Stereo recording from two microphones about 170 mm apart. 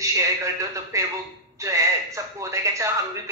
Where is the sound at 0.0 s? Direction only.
20° right (ahead or behind).